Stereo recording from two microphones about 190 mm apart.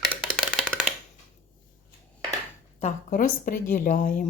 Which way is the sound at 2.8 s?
40° left (ahead or behind).